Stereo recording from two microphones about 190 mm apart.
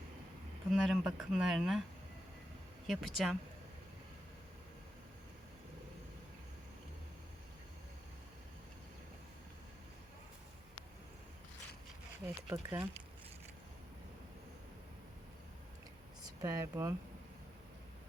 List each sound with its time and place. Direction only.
0.7 s speech: 5° right (ahead or behind)
2.8 s speech: centre (ahead or behind)
12.2 s speech: 20° right (ahead or behind)
16.4 s speech: 15° right (ahead or behind)